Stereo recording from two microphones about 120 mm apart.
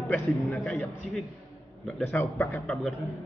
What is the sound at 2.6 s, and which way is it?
Speech, centre (ahead or behind).